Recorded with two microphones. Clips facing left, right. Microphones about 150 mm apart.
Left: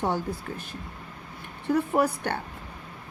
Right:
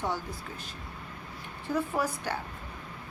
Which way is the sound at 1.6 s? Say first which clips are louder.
Left 6 dB; 55° left (ahead or behind).